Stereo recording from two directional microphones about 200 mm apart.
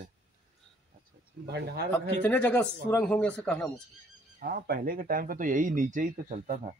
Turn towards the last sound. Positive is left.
turn(degrees=-40)  # may be behind; listen again after turning